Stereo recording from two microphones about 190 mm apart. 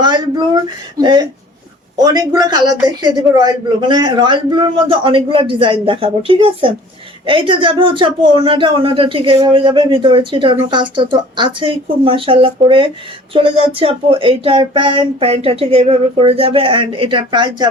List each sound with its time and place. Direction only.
0.0 s speech: 25° right (ahead or behind)